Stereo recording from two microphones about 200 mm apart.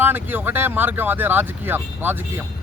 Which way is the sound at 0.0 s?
10° right (ahead or behind).